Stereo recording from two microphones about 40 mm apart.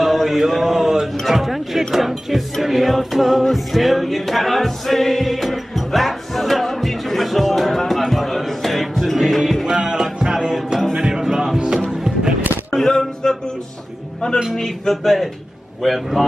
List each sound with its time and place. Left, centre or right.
0.0 s mantra: centre
1.2 s speech: centre
2.6 s music: centre
9.8 s music: centre
12.7 s music: centre
14.5 s speech: centre